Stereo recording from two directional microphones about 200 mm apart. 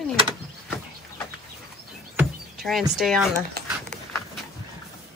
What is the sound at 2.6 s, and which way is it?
Speech, centre (ahead or behind).